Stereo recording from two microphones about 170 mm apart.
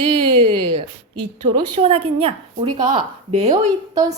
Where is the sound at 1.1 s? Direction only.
25° right (ahead or behind).